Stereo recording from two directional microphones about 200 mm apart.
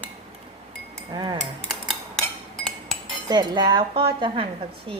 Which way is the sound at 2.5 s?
Centre (ahead or behind).